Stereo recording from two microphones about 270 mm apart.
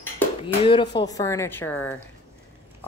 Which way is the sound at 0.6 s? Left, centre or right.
Centre.